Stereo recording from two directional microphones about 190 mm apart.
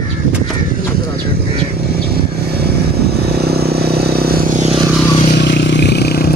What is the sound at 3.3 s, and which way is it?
Vehicle, 55° right (ahead or behind).